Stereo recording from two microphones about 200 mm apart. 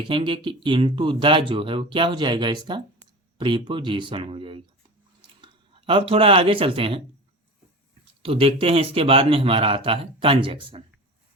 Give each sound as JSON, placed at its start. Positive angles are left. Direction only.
{"t": 0.0, "sound": "speech", "side_deg": -25}
{"t": 8.2, "sound": "speech", "side_deg": -30}